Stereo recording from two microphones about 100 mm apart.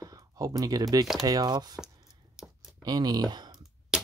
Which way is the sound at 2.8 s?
45° right (ahead or behind).